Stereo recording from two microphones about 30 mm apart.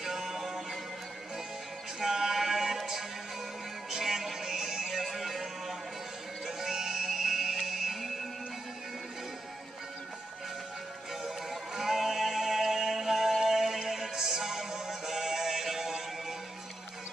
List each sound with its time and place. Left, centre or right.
0.0 s music: centre
2.0 s male singing: centre
2.8 s music: centre
5.1 s music: centre
6.4 s music: centre
11.2 s music: centre